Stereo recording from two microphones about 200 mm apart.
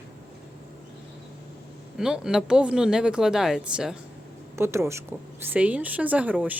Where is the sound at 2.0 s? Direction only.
5° right (ahead or behind).